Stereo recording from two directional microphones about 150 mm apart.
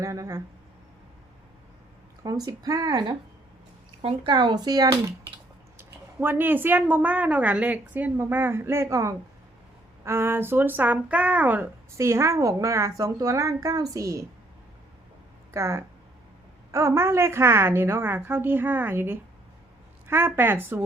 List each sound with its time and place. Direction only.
0.0 s speech: 20° right (ahead or behind)
2.2 s a woman's voice: 25° right (ahead or behind)
15.5 s a woman's voice: 20° right (ahead or behind)